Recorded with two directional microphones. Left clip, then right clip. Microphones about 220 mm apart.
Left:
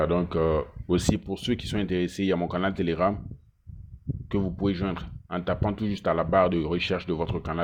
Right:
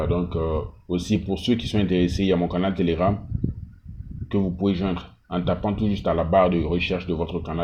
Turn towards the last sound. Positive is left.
turn(degrees=45)  # may be behind; listen again after turning